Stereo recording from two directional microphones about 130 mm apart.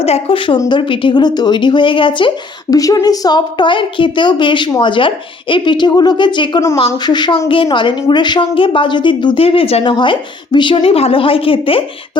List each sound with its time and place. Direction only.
0.0 s speech: 45° left (ahead or behind)